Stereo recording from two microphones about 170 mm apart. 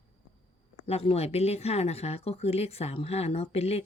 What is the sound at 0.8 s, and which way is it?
Speech, 35° left (ahead or behind).